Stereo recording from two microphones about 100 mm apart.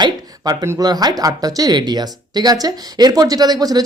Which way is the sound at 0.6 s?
30° right (ahead or behind).